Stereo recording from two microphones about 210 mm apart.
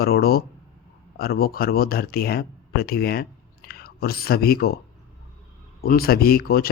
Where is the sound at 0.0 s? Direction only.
45° left (ahead or behind).